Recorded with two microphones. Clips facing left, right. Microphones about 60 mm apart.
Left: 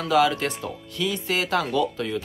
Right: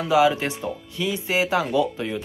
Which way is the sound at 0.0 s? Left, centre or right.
Centre.